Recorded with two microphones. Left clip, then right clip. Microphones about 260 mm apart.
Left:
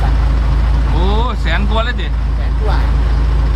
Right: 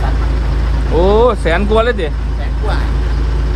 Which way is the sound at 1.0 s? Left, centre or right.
Centre.